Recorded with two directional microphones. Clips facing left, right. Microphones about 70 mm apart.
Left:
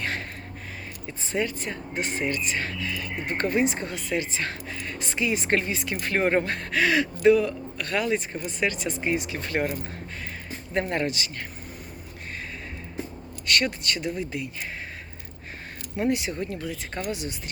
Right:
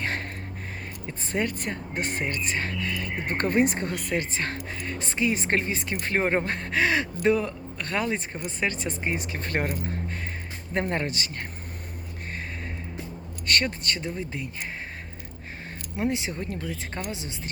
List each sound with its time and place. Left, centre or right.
0.0 s a sound: right
1.3 s speech: right
6.0 s speech: right
10.8 s speech: right
13.5 s speech: right
16.0 s speech: right